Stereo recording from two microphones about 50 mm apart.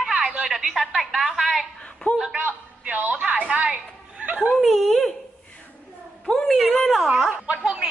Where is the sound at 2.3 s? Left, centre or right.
Right.